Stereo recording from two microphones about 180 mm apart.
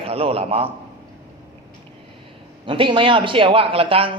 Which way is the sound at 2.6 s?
30° right (ahead or behind).